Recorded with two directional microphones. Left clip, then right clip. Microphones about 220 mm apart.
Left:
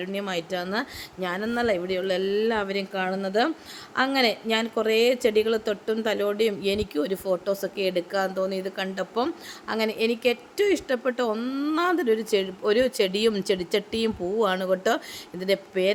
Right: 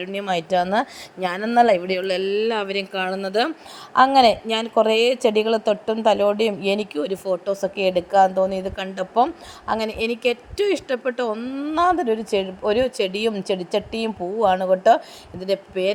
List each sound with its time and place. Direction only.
0.0 s a woman's voice: 20° right (ahead or behind)